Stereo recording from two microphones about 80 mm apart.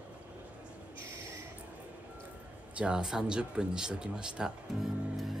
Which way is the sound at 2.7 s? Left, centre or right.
Centre.